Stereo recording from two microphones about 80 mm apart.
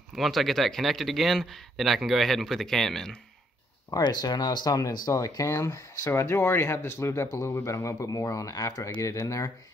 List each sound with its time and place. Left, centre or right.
0.1 s speech: centre
4.0 s speech: left